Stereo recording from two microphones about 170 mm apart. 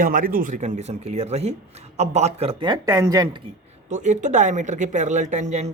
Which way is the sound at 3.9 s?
45° right (ahead or behind).